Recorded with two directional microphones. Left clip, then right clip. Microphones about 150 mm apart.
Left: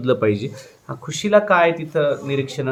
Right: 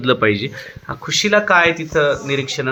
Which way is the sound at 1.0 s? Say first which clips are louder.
Right 1 dB; 10° right (ahead or behind).